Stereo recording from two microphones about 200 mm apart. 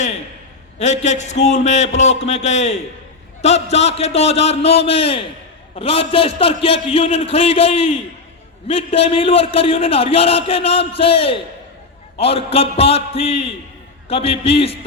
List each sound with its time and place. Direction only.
0.8 s a man's voice: 35° left (ahead or behind)